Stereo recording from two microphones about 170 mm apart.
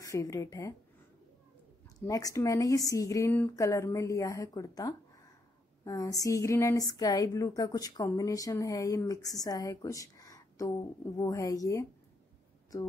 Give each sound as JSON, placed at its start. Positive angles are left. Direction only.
{"t": 0.0, "sound": "a woman's voice", "side_deg": 20}
{"t": 2.0, "sound": "a woman's voice", "side_deg": 20}